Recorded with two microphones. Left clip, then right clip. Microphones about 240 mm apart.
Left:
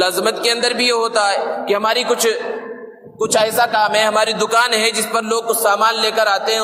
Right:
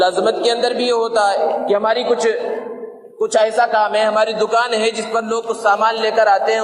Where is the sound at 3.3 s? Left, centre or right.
Left.